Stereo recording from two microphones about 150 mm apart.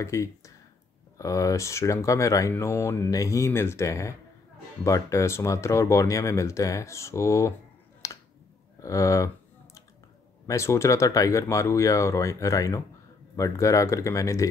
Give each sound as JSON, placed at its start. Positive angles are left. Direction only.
{"t": 0.0, "sound": "speech", "side_deg": 20}
{"t": 8.0, "sound": "a sound", "side_deg": 20}
{"t": 8.7, "sound": "speech", "side_deg": 20}
{"t": 10.4, "sound": "speech", "side_deg": 20}